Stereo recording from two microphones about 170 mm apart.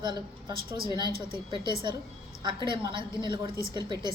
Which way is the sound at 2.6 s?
25° right (ahead or behind).